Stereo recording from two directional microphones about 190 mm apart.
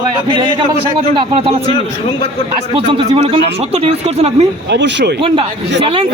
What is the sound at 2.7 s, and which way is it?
Speech, 25° right (ahead or behind).